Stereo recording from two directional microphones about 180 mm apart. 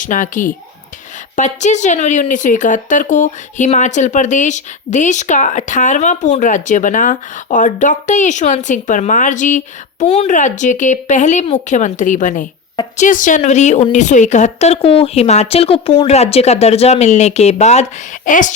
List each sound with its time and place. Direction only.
0.0 s a woman's voice: 45° left (ahead or behind)